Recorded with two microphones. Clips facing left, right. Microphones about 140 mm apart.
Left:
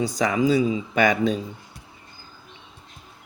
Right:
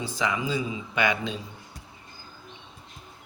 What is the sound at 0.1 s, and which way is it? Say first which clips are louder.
Speech: left 4 dB; 40° left (ahead or behind).